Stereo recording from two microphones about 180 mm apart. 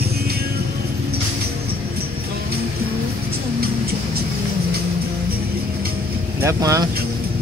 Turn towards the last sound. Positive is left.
turn(degrees=-20)  # may be behind; listen again after turning